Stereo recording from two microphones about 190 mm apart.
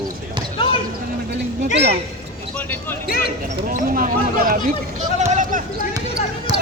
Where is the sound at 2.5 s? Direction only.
10° left (ahead or behind).